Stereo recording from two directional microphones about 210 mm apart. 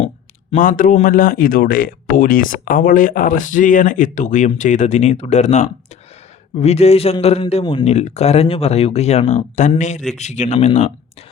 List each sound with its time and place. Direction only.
0.5 s a man's voice: 40° left (ahead or behind)